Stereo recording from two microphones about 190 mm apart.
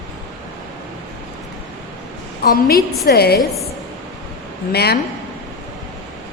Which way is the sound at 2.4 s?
50° left (ahead or behind).